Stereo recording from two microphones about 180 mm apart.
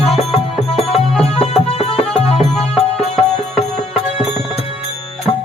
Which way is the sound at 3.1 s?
35° left (ahead or behind).